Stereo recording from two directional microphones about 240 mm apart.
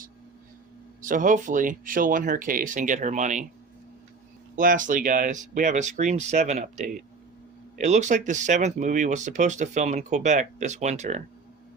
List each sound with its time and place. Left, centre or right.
1.0 s speech: right
4.5 s speech: right